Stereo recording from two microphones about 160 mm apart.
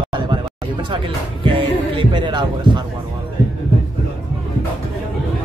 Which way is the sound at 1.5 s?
30° right (ahead or behind).